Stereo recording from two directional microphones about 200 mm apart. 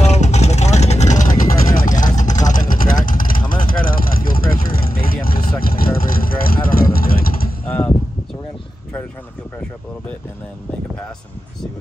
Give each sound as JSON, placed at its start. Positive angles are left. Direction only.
{"t": 0.0, "sound": "vehicle", "side_deg": 35}
{"t": 7.6, "sound": "mechanisms", "side_deg": 10}